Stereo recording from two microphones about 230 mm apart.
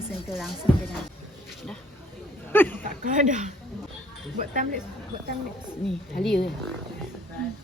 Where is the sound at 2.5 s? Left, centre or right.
Centre.